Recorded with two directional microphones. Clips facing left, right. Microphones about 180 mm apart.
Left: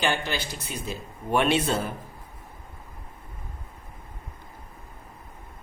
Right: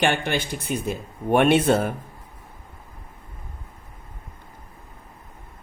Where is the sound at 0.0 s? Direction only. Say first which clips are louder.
Right 5 dB; 60° right (ahead or behind).